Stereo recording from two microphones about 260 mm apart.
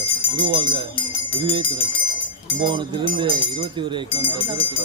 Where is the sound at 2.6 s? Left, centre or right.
Centre.